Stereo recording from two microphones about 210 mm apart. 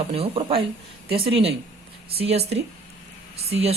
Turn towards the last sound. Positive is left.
turn(degrees=-30)  # may be behind; listen again after turning